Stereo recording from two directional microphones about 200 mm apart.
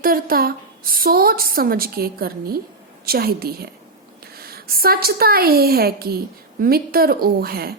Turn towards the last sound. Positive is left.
turn(degrees=-50)  # may be behind; listen again after turning